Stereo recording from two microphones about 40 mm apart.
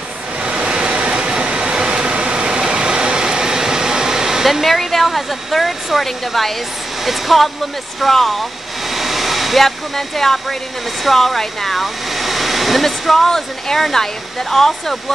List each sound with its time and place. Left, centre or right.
0.4 s vehicle: right
4.5 s speech: centre